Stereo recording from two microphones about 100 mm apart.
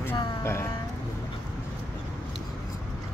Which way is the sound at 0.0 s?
25° left (ahead or behind).